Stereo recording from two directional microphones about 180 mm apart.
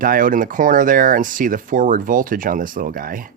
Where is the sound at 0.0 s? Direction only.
50° right (ahead or behind).